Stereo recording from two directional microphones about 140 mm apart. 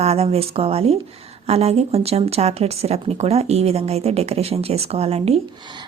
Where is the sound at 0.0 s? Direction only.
45° right (ahead or behind).